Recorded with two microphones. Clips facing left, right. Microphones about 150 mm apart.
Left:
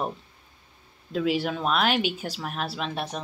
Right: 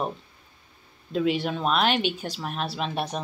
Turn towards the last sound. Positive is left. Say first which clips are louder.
# right 2 dB
turn(degrees=-5)  # may be behind; listen again after turning